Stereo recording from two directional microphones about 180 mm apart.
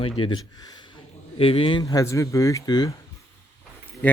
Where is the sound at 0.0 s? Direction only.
30° left (ahead or behind).